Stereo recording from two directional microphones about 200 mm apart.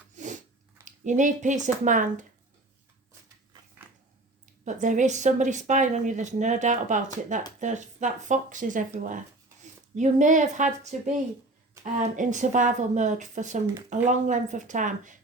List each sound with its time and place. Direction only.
0.2 s sneeze: 40° right (ahead or behind)
0.9 s speech: 40° right (ahead or behind)
4.6 s speech: 40° right (ahead or behind)